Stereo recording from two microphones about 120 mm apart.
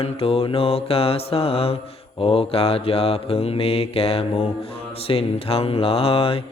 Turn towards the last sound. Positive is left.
turn(degrees=55)  # may be behind; listen again after turning